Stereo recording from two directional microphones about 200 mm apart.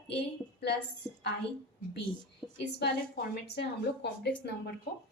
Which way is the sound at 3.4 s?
55° left (ahead or behind).